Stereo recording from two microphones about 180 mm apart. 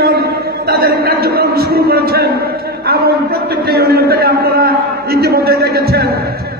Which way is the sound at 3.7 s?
60° right (ahead or behind).